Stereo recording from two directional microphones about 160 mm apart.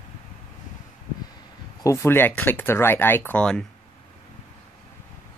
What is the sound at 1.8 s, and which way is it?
Speech, 15° left (ahead or behind).